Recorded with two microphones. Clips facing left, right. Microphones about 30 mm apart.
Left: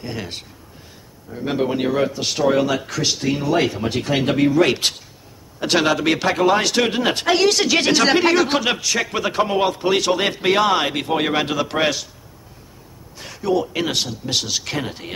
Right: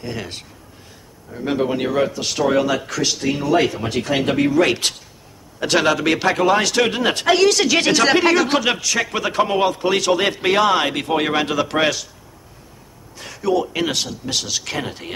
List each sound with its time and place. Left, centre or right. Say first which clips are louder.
0.0 s a man's voice: right 1 dB; centre
2.1 s speech: even; left
2.4 s a man's voice: even; centre
13.2 s speech: right 1 dB; centre